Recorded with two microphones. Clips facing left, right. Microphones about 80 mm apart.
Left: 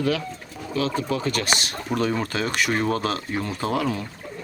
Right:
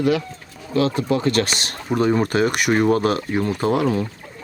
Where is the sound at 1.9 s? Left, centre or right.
Centre.